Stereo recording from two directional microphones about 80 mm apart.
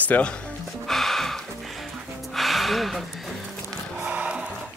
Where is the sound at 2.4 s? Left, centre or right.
Centre.